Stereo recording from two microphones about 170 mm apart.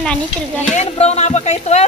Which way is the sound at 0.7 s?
40° left (ahead or behind).